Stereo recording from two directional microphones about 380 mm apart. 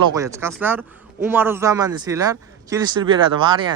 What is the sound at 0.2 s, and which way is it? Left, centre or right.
A man's voice, centre.